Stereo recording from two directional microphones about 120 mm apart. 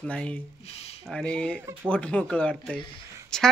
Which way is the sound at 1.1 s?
5° left (ahead or behind).